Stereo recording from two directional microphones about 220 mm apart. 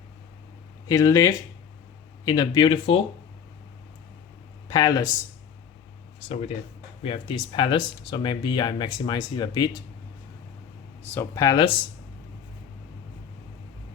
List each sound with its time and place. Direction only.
0.9 s speech: 15° left (ahead or behind)
4.7 s speech: 20° left (ahead or behind)
6.1 s speech: 25° left (ahead or behind)
11.0 s speech: 10° left (ahead or behind)